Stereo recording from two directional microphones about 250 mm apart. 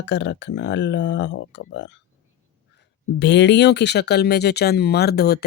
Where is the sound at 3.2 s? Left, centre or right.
Left.